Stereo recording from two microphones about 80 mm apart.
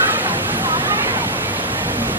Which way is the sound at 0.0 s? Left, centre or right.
Right.